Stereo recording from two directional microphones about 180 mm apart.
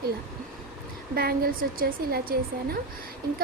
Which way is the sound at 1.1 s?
55° right (ahead or behind).